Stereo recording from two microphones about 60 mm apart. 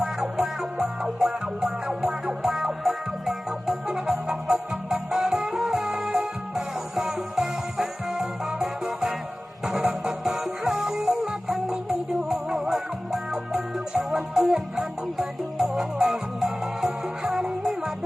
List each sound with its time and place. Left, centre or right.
0.0 s music: centre